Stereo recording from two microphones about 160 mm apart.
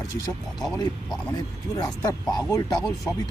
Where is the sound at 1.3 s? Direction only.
20° left (ahead or behind).